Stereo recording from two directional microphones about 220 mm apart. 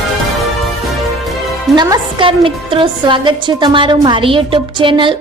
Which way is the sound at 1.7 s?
20° right (ahead or behind).